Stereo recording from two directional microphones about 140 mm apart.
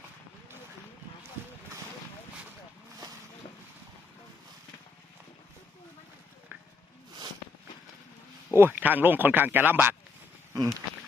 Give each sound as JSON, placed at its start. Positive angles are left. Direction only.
{"t": 8.5, "sound": "speech", "side_deg": -15}